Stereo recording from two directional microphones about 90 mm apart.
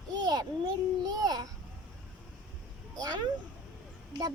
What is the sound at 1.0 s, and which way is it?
Speech, 50° right (ahead or behind).